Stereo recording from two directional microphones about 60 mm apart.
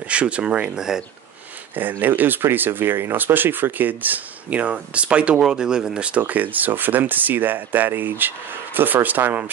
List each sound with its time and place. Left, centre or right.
0.1 s speech: centre
1.8 s speech: right